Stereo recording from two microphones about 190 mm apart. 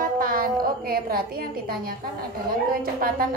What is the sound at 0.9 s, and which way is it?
A woman's voice, 50° right (ahead or behind).